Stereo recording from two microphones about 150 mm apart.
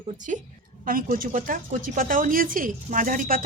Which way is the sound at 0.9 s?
70° right (ahead or behind).